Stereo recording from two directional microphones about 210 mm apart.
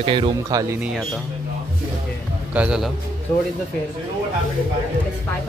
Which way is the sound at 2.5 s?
5° right (ahead or behind).